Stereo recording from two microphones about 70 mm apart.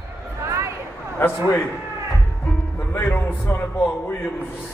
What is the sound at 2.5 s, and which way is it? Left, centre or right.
Music, left.